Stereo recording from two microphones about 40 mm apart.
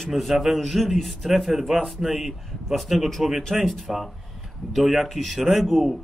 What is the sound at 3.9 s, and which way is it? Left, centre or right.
Speech, centre.